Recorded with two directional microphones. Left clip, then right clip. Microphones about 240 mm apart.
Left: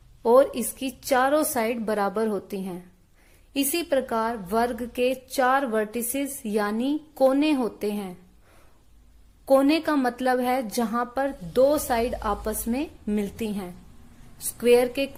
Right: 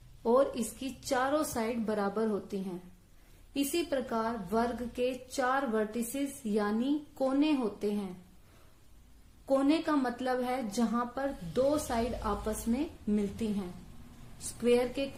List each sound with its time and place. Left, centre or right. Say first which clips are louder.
0.2 s a woman's voice: left 9 dB; left
9.5 s a woman's voice: left 8 dB; left